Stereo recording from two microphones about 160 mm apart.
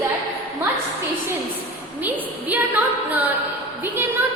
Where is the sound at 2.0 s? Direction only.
10° right (ahead or behind).